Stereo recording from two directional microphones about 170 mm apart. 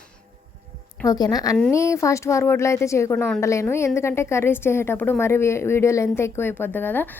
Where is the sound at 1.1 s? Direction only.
20° left (ahead or behind).